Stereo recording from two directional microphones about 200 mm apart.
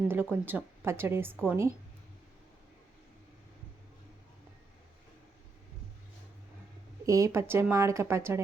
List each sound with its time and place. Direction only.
0.1 s speech: 10° right (ahead or behind)
7.0 s speech: 15° right (ahead or behind)